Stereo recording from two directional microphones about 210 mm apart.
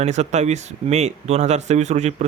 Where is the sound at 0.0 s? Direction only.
35° right (ahead or behind).